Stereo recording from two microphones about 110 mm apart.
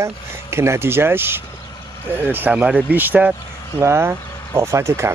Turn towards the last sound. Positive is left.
turn(degrees=-25)  # may be behind; listen again after turning